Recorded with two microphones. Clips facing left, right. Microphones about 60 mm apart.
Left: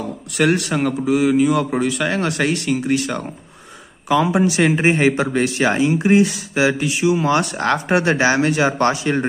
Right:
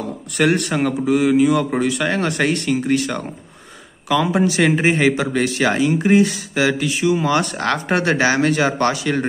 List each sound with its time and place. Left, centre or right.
0.4 s speech: centre
4.8 s speech: left